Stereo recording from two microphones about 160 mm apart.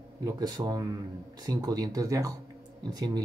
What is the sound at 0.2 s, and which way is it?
Speech, 25° right (ahead or behind).